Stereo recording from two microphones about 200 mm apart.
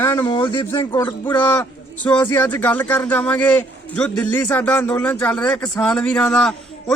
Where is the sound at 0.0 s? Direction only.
20° left (ahead or behind).